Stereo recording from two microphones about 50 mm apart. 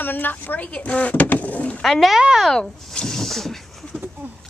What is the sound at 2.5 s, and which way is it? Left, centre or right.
Speech, centre.